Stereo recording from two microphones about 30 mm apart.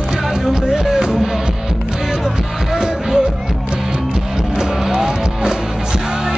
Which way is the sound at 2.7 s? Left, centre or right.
Right.